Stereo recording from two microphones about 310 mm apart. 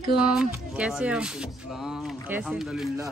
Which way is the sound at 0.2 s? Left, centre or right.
Centre.